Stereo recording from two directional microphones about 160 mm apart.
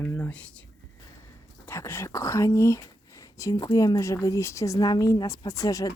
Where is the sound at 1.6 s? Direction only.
15° left (ahead or behind).